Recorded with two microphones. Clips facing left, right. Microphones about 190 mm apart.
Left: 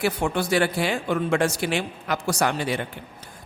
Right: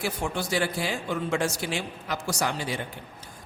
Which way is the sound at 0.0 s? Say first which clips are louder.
Left 6 dB; 60° left (ahead or behind).